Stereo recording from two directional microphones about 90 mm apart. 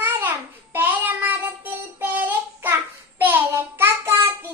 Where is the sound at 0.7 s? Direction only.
20° right (ahead or behind).